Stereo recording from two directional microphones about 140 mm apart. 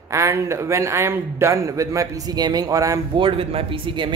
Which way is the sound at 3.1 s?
40° right (ahead or behind).